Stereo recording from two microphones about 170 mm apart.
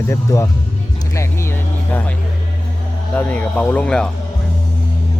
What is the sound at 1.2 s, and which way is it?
Vehicle, 15° left (ahead or behind).